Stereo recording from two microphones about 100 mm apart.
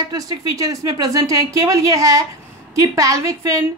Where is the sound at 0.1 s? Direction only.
40° right (ahead or behind).